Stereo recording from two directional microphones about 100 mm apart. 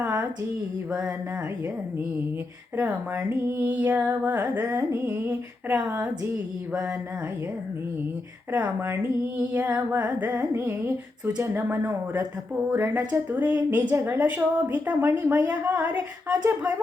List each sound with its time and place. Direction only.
2.8 s speech: 20° right (ahead or behind)
5.7 s a woman's voice: 10° right (ahead or behind)
8.5 s a woman's voice: 15° right (ahead or behind)